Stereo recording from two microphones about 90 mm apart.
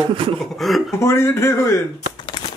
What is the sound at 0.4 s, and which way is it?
Speech, centre (ahead or behind).